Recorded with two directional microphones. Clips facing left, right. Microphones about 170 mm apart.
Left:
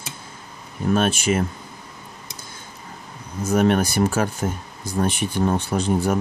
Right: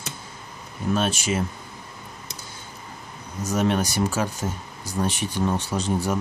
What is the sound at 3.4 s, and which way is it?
Speech, 55° left (ahead or behind).